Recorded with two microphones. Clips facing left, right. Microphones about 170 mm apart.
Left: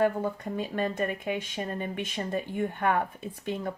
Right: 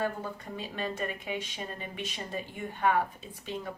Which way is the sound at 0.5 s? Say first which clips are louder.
Left 3 dB; 50° left (ahead or behind).